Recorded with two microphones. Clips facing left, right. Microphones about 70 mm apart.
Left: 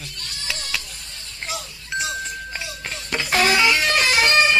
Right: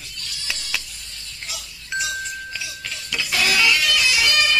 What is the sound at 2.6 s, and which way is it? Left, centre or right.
Music, left.